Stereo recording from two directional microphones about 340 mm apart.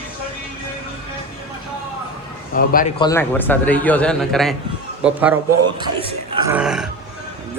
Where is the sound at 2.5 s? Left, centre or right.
Left.